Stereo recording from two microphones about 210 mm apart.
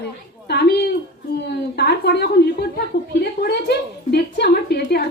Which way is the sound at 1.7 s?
50° left (ahead or behind).